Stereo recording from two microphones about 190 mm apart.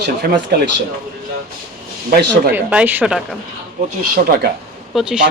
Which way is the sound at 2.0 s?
55° right (ahead or behind).